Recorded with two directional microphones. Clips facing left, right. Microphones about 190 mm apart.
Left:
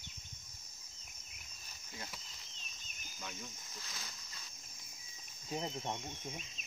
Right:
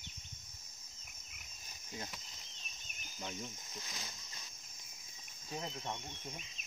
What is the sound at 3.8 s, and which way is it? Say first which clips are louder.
Speech: right 2 dB; 15° right (ahead or behind).